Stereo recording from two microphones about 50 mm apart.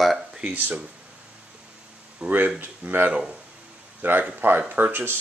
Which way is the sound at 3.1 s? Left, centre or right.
Centre.